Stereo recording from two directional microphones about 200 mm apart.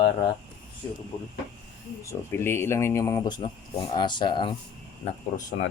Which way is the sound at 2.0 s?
15° left (ahead or behind).